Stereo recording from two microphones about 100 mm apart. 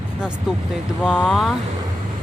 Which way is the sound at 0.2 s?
5° right (ahead or behind).